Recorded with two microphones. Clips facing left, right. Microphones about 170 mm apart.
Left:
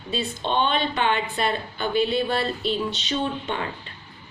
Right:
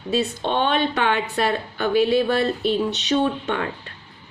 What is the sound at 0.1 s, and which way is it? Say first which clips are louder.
Speech: right 4 dB; 65° right (ahead or behind).